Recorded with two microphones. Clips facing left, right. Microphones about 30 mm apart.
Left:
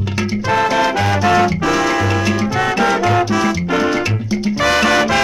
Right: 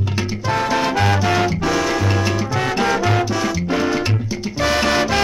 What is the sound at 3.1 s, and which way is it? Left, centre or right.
Music, centre.